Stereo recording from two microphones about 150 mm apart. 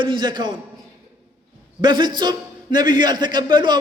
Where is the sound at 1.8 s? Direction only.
30° right (ahead or behind).